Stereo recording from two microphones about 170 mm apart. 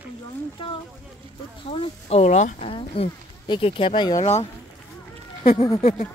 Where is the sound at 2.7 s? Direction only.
30° left (ahead or behind).